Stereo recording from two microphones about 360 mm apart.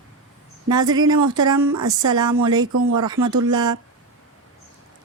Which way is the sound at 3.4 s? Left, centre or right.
Centre.